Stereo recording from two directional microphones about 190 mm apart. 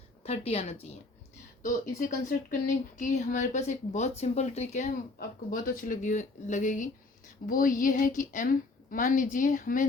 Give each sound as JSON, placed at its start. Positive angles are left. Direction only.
{"t": 0.2, "sound": "a woman's voice", "side_deg": 30}
{"t": 1.6, "sound": "a woman's voice", "side_deg": 40}